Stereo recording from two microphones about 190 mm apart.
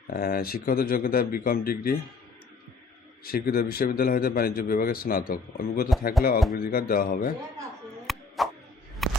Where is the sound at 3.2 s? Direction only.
50° left (ahead or behind).